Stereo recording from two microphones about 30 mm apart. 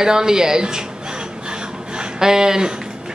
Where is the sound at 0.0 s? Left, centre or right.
Right.